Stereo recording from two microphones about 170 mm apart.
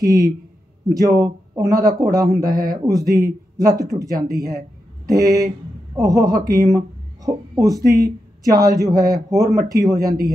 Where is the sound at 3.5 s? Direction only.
20° right (ahead or behind).